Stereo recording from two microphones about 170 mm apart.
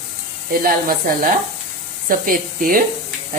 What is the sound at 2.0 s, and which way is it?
Speech, 55° right (ahead or behind).